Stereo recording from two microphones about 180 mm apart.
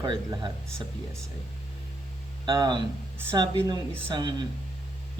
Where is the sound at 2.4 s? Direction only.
25° right (ahead or behind).